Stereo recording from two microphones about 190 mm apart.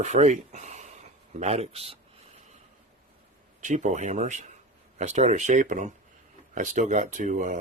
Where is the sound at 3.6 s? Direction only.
40° right (ahead or behind).